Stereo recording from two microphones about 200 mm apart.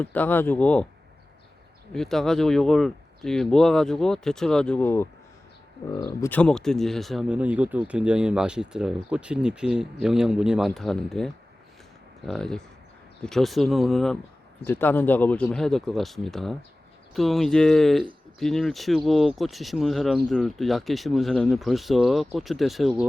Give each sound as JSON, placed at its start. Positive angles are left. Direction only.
{"t": 0.0, "sound": "speech", "side_deg": 10}
{"t": 1.9, "sound": "speech", "side_deg": 0}